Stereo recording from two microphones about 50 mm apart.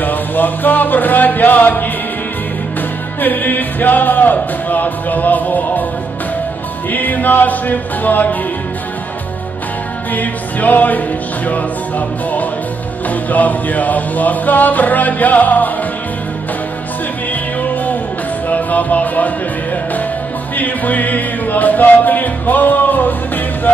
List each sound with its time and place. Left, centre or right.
0.0 s music: left
3.2 s speech: left
6.9 s speech: left
10.1 s speech: left
13.1 s speech: left
17.3 s music: left
20.5 s music: left